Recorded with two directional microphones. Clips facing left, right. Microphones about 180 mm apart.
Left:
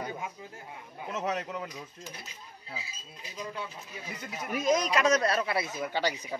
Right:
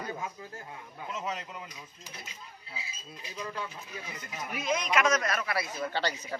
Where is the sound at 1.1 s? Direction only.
65° left (ahead or behind).